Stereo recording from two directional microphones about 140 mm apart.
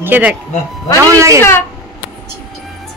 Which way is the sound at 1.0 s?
25° right (ahead or behind).